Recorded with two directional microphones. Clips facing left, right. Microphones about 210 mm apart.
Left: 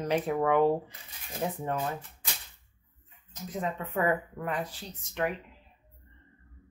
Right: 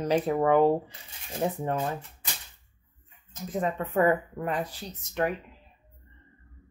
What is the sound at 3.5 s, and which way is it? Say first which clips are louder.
Speech: right 5 dB; 50° right (ahead or behind).